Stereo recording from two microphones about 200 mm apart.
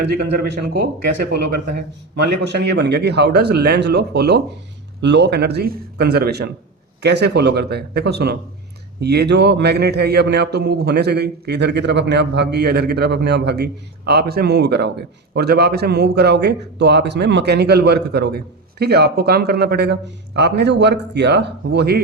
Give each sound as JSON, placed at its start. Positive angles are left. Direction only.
{"t": 0.1, "sound": "a man's voice", "side_deg": -50}